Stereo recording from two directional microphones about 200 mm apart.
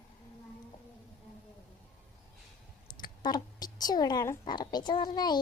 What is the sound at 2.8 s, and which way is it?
A woman's voice, 20° left (ahead or behind).